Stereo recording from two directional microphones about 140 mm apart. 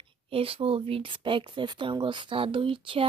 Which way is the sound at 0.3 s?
40° right (ahead or behind).